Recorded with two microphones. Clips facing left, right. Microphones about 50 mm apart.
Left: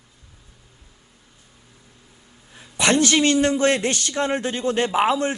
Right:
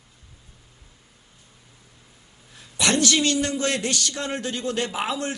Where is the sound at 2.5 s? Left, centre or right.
Left.